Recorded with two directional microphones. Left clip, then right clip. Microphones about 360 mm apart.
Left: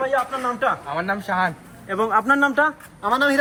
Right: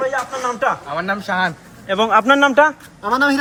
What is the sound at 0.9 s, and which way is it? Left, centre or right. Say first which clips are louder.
Speech: right 3 dB; centre.